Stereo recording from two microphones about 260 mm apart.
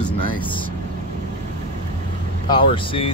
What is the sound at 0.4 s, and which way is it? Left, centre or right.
Speech, centre.